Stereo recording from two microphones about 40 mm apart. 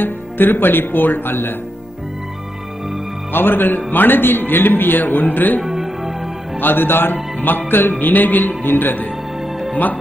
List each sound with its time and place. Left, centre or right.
0.0 s a man's voice: left
3.3 s a man's voice: left
5.6 s music: centre
6.6 s a man's voice: left